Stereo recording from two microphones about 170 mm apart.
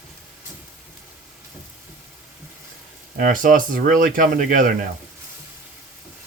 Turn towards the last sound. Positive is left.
turn(degrees=-55)  # may be behind; listen again after turning